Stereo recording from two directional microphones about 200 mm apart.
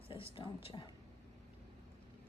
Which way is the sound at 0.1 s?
25° left (ahead or behind).